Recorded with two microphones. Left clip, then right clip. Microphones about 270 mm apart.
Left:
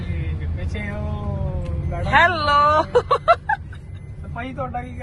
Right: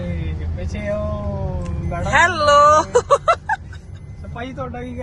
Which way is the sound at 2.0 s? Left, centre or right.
Centre.